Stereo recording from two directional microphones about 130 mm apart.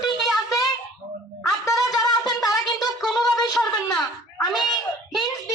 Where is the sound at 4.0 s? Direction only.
Centre (ahead or behind).